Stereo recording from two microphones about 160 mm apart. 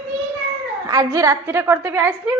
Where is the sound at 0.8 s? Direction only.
20° right (ahead or behind).